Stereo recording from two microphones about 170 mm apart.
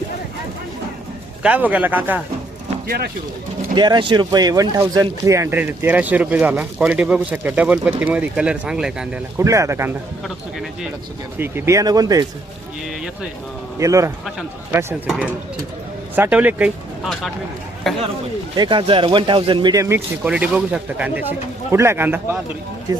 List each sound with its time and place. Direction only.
1.4 s speech: 10° right (ahead or behind)
2.8 s speech: 60° right (ahead or behind)
3.8 s speech: 25° right (ahead or behind); by 9.2 s 5° right (ahead or behind)
9.4 s speech: 20° right (ahead or behind)
11.3 s speech: 10° right (ahead or behind)
13.7 s speech: 20° right (ahead or behind); by 18.0 s centre (ahead or behind)
18.5 s speech: 30° right (ahead or behind)
20.2 s speech: 5° right (ahead or behind)